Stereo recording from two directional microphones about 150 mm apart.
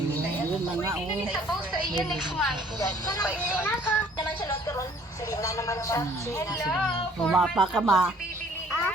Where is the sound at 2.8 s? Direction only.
25° left (ahead or behind).